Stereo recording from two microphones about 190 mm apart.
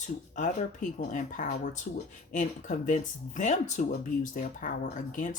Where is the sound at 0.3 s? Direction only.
40° left (ahead or behind).